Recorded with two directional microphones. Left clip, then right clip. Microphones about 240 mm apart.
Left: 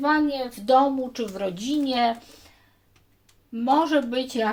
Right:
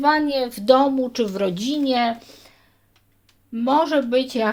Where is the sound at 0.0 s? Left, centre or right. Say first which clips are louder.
Right 4 dB; right.